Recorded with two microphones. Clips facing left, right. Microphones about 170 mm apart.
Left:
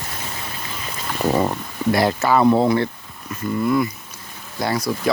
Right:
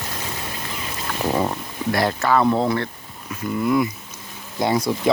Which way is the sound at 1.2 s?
5° left (ahead or behind).